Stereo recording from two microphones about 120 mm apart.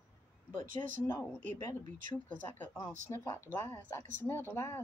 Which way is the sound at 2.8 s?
25° left (ahead or behind).